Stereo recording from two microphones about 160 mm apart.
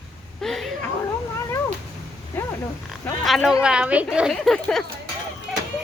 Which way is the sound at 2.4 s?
10° left (ahead or behind).